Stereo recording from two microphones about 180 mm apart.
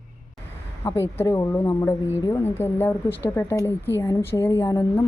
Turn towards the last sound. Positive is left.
turn(degrees=15)  # may be behind; listen again after turning